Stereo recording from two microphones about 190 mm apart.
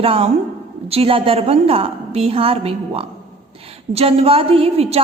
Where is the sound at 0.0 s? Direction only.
30° right (ahead or behind).